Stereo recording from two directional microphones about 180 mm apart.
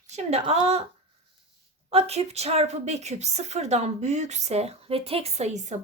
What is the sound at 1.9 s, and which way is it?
A woman's voice, 35° right (ahead or behind).